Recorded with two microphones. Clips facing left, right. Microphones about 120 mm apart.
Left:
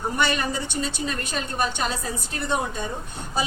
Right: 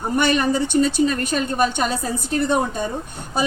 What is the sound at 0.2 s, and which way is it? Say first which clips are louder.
A woman's voice: right 8 dB; 50° right (ahead or behind).